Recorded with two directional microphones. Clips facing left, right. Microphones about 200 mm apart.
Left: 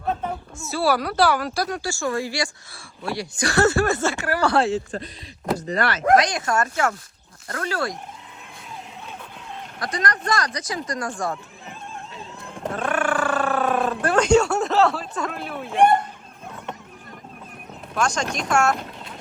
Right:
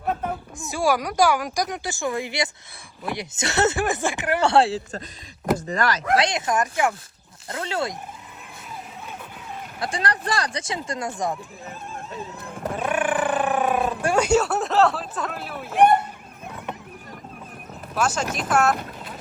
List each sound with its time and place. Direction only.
0.0 s a sound: 5° right (ahead or behind)
0.6 s speech: 15° right (ahead or behind)
5.5 s speech: 40° right (ahead or behind)
6.1 s speech: 25° right (ahead or behind)
9.8 s speech: 30° right (ahead or behind)
12.4 s a sound: 5° right (ahead or behind)
15.8 s speech: 15° right (ahead or behind)
17.9 s speech: 5° right (ahead or behind)